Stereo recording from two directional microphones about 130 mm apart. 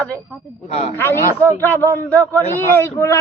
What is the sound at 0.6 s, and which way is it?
Speech, 50° left (ahead or behind).